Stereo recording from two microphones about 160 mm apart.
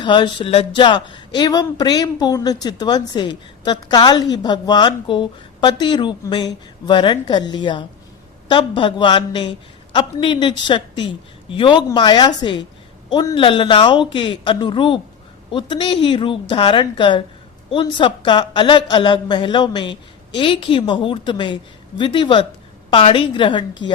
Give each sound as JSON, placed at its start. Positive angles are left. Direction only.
{"t": 0.0, "sound": "a woman's voice", "side_deg": 30}